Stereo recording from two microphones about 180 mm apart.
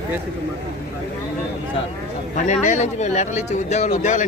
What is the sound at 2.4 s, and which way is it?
Speech, 40° left (ahead or behind).